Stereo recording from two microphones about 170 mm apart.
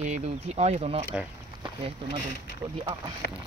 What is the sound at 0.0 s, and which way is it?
Speech, 45° right (ahead or behind).